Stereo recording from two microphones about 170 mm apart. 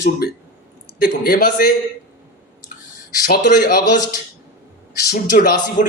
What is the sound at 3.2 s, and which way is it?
Speech, 60° left (ahead or behind).